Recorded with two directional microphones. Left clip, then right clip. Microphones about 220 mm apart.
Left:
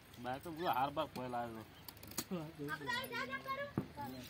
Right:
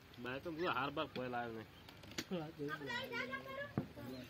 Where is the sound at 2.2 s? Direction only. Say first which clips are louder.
Right 1 dB; 55° left (ahead or behind).